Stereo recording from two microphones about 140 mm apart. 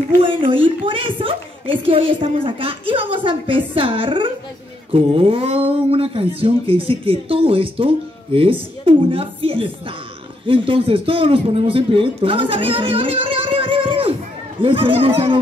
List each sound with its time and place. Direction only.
0.2 s a man's voice: 40° right (ahead or behind)